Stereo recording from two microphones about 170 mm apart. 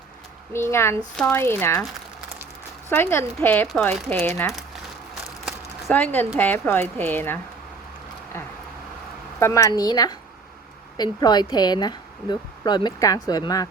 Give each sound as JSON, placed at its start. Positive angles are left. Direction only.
{"t": 0.5, "sound": "a woman's voice", "side_deg": 15}
{"t": 2.9, "sound": "a woman's voice", "side_deg": 15}
{"t": 5.9, "sound": "a woman's voice", "side_deg": 10}
{"t": 9.4, "sound": "speech", "side_deg": 20}